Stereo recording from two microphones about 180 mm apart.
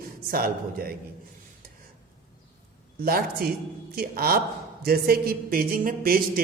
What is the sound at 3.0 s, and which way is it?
A man's voice, 55° right (ahead or behind).